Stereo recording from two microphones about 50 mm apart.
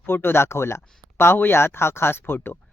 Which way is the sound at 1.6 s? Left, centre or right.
Left.